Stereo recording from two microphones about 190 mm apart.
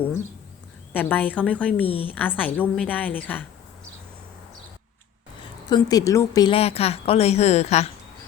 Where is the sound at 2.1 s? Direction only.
10° left (ahead or behind).